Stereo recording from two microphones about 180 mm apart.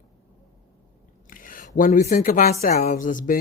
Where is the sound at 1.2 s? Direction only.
50° left (ahead or behind).